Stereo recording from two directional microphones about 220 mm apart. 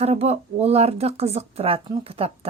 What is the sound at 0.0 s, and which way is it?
Speech, 30° right (ahead or behind).